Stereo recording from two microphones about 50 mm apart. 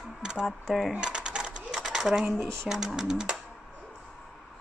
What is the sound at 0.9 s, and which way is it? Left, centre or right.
Sewing machine, centre.